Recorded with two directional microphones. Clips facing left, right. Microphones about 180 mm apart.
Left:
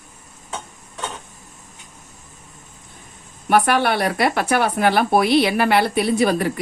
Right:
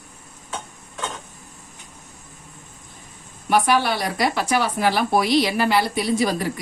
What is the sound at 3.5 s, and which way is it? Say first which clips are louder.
Speech: left 2 dB; 55° left (ahead or behind).